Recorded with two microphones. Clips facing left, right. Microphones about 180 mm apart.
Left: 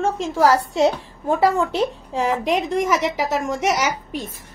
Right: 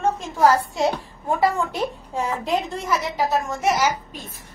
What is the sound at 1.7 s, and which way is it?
A woman's voice, 90° left.